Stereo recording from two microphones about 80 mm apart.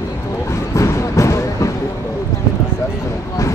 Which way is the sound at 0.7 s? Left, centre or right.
Left.